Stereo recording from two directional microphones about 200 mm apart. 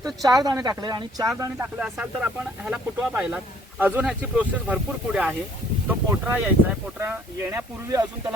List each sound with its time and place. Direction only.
0.0 s speech: 20° right (ahead or behind)
1.4 s speech: 5° right (ahead or behind)